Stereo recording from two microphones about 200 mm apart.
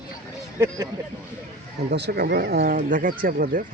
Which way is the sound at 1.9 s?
55° right (ahead or behind).